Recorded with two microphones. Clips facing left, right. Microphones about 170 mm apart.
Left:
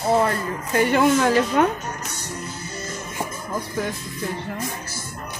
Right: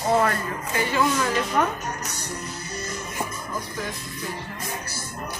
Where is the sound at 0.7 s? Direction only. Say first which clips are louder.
Left 6 dB; 55° left (ahead or behind).